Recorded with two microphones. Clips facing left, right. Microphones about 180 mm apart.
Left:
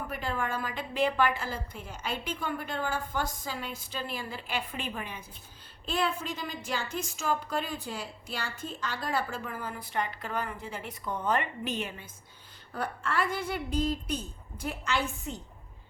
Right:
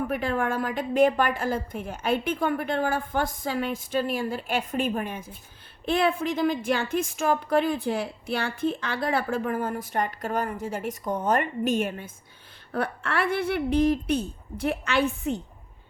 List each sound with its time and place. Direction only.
0.1 s a woman's voice: 55° right (ahead or behind)
5.8 s a woman's voice: 55° right (ahead or behind)
12.7 s a woman's voice: 65° right (ahead or behind)